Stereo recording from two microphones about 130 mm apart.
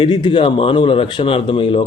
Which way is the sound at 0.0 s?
35° left (ahead or behind).